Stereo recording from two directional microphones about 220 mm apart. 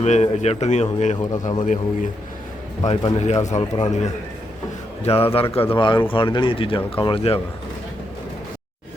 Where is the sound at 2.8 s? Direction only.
30° left (ahead or behind).